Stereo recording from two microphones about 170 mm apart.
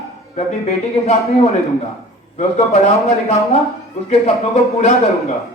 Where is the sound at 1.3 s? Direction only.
40° left (ahead or behind).